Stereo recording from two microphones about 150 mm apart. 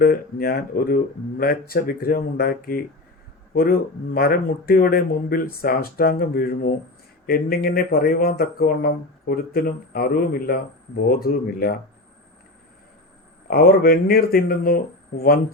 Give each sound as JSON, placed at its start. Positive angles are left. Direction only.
{"t": 0.0, "sound": "speech", "side_deg": 85}
{"t": 13.5, "sound": "speech", "side_deg": 80}